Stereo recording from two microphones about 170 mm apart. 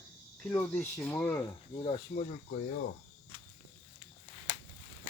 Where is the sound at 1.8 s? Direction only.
35° left (ahead or behind).